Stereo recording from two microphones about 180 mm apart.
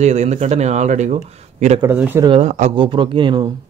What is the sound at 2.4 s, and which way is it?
Speech, 40° right (ahead or behind).